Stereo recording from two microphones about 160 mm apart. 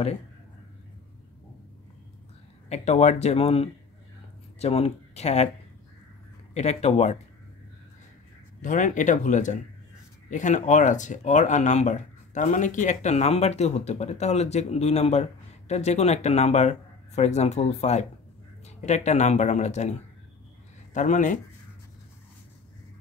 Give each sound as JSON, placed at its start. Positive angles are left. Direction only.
{"t": 2.7, "sound": "speech", "side_deg": 45}
{"t": 6.5, "sound": "speech", "side_deg": 45}
{"t": 8.5, "sound": "speech", "side_deg": 55}